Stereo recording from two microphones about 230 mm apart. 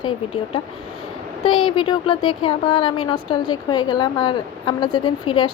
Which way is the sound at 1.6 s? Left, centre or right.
Left.